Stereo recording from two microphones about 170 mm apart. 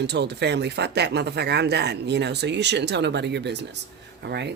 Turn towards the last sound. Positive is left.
turn(degrees=-80)